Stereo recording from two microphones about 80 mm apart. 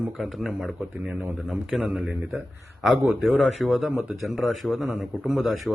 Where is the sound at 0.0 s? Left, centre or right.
Centre.